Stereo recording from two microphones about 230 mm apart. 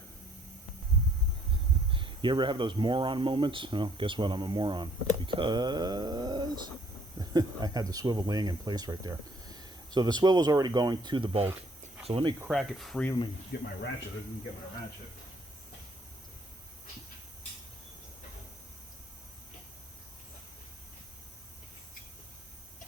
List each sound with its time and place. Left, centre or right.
1.9 s speech: right
12.5 s speech: centre
13.5 s speech: left